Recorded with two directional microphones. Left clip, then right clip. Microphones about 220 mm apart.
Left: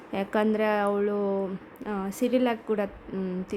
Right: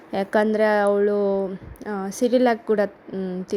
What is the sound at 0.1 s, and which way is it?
Speech, 15° right (ahead or behind).